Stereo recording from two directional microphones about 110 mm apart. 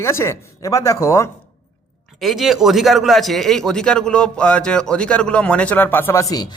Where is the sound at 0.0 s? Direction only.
25° left (ahead or behind).